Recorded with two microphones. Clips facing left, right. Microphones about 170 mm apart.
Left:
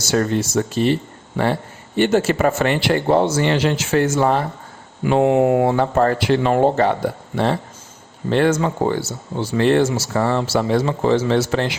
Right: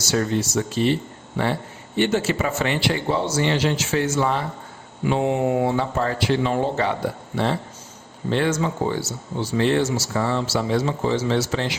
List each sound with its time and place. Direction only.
0.0 s speech: 50° left (ahead or behind)
2.0 s speech: 45° left (ahead or behind)
5.0 s speech: 60° left (ahead or behind)
8.3 s speech: 55° left (ahead or behind)